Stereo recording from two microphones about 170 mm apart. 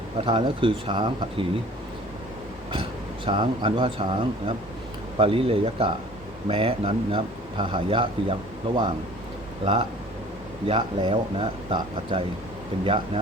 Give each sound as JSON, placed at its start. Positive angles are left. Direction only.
{"t": 0.2, "sound": "a man's voice", "side_deg": -30}
{"t": 3.2, "sound": "a man's voice", "side_deg": -30}